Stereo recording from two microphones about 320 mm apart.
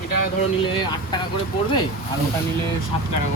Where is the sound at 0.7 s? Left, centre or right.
Centre.